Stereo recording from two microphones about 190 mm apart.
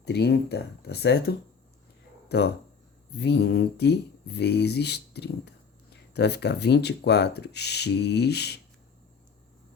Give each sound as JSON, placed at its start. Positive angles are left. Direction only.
{"t": 0.0, "sound": "speech", "side_deg": 60}